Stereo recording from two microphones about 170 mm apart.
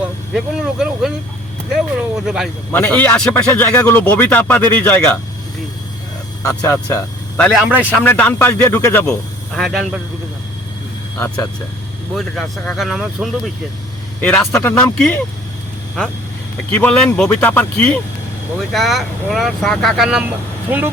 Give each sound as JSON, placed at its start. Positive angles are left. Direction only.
{"t": 0.3, "sound": "speech", "side_deg": 0}
{"t": 2.7, "sound": "speech", "side_deg": 10}
{"t": 6.4, "sound": "speech", "side_deg": 20}
{"t": 7.7, "sound": "speech", "side_deg": -10}
{"t": 7.9, "sound": "speech", "side_deg": 10}
{"t": 9.6, "sound": "speech", "side_deg": 0}
{"t": 12.1, "sound": "speech", "side_deg": 0}
{"t": 16.7, "sound": "speech", "side_deg": 10}